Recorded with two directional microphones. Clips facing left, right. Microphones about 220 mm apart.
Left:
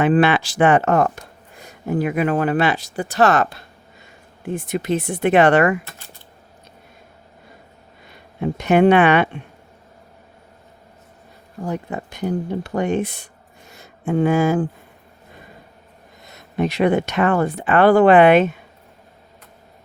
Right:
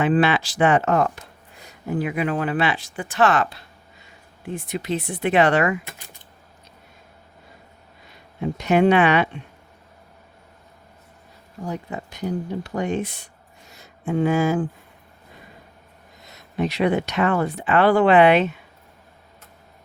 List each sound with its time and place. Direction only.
0.0 s speech: 55° left (ahead or behind)
8.4 s speech: 55° left (ahead or behind)
11.6 s speech: 50° left (ahead or behind)
13.7 s a sound: 50° left (ahead or behind)
16.2 s speech: 50° left (ahead or behind)